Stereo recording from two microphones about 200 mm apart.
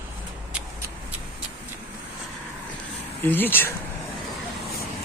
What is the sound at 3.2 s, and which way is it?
Speech, 10° left (ahead or behind).